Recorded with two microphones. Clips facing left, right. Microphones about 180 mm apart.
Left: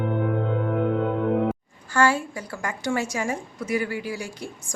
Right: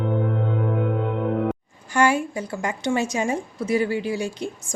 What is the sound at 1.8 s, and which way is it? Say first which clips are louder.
A woman's voice: right 2 dB; 15° right (ahead or behind).